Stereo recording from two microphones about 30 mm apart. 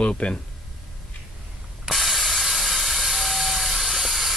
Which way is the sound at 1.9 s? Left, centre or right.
Centre.